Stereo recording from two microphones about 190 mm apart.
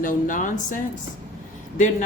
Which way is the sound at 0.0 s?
45° left (ahead or behind).